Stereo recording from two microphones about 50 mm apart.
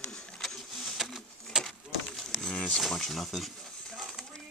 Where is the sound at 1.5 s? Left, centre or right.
Centre.